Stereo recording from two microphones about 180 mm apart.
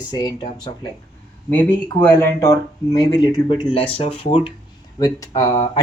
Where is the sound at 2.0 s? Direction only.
15° left (ahead or behind).